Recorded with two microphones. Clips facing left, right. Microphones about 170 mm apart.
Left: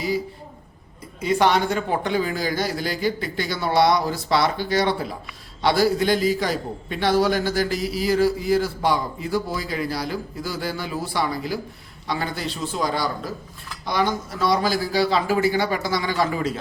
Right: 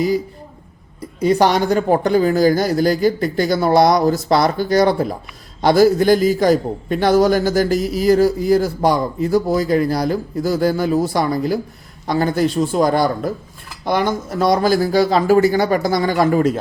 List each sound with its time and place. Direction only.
1.2 s a man's voice: 40° right (ahead or behind)